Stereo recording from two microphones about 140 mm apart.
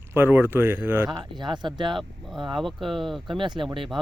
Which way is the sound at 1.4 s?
35° right (ahead or behind).